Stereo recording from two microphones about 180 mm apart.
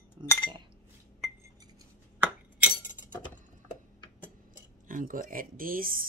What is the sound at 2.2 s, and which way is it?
Glass, 10° right (ahead or behind).